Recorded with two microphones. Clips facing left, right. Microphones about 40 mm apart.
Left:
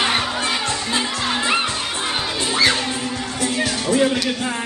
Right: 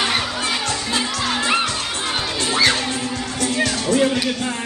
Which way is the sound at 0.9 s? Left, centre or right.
Centre.